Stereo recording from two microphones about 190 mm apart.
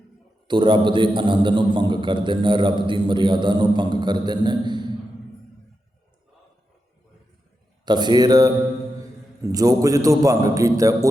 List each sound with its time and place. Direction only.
0.4 s a man's voice: 25° right (ahead or behind)
7.9 s a man's voice: 20° right (ahead or behind)